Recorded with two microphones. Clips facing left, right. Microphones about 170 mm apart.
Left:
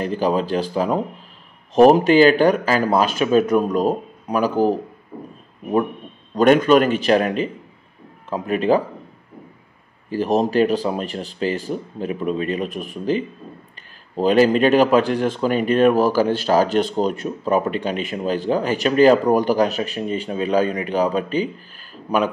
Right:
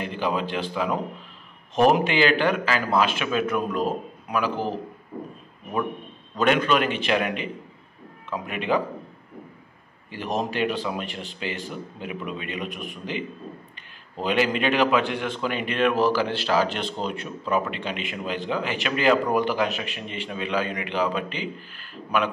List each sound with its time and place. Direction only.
0.0 s a man's voice: 40° left (ahead or behind)
6.3 s a man's voice: 45° left (ahead or behind)
10.0 s a man's voice: 40° left (ahead or behind)